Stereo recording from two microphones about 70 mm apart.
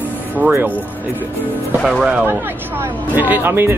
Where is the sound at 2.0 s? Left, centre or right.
Centre.